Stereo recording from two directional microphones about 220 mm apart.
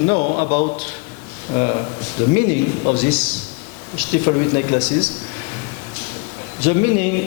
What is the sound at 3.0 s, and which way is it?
Speech, 10° left (ahead or behind).